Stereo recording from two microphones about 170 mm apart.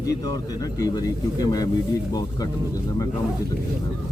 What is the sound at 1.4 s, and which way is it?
Speech, 20° left (ahead or behind).